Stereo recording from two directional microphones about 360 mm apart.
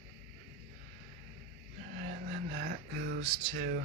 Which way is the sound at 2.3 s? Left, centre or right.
Right.